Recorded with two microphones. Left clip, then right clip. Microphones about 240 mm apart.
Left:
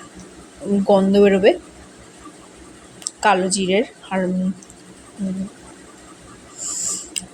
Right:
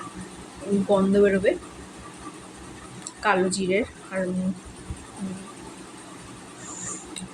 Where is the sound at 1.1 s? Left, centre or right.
Left.